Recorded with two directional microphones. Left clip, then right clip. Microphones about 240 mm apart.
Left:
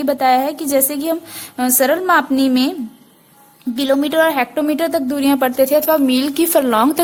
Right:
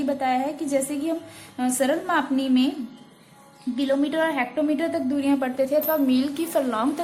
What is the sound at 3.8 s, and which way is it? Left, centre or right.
A woman's voice, left.